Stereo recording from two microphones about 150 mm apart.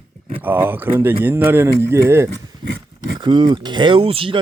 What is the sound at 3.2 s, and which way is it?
Speech, 30° right (ahead or behind).